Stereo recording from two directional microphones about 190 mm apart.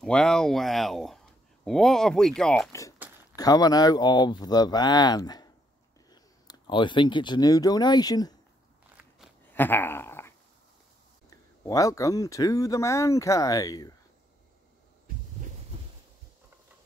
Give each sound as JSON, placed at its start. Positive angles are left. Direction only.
{"t": 0.0, "sound": "speech", "side_deg": 5}
{"t": 3.3, "sound": "speech", "side_deg": 20}
{"t": 9.5, "sound": "dog", "side_deg": 10}
{"t": 11.2, "sound": "speech", "side_deg": 15}